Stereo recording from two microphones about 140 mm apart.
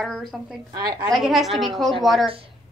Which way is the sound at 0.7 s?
30° right (ahead or behind).